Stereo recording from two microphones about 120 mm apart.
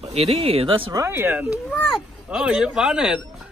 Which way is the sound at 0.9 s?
25° right (ahead or behind).